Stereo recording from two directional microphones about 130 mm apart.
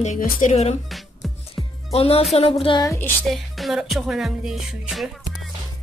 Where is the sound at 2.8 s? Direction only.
20° left (ahead or behind).